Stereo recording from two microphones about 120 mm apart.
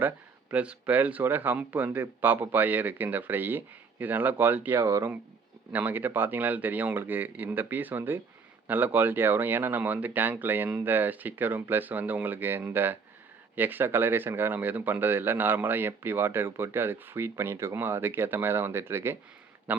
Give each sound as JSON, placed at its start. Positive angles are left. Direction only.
{"t": 0.5, "sound": "speech", "side_deg": -10}
{"t": 4.8, "sound": "speech", "side_deg": -25}
{"t": 5.7, "sound": "speech", "side_deg": -15}